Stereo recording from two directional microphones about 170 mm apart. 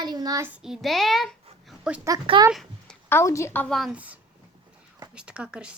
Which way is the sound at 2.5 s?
Centre (ahead or behind).